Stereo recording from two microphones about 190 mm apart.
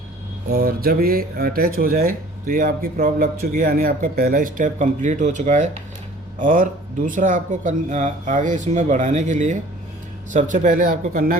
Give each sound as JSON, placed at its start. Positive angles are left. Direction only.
{"t": 0.5, "sound": "speech", "side_deg": -50}